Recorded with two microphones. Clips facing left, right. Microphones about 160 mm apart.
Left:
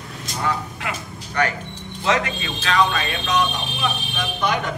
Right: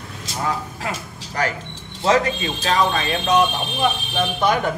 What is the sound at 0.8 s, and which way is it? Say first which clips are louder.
Speech: right 1 dB; 35° right (ahead or behind).